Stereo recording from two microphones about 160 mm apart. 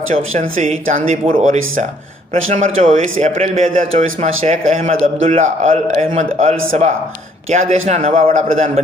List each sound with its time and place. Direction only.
0.1 s a man's voice: 50° right (ahead or behind)
8.3 s a man's voice: 50° right (ahead or behind)